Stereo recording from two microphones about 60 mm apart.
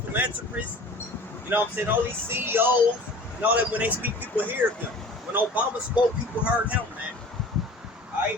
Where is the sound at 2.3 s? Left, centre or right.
Right.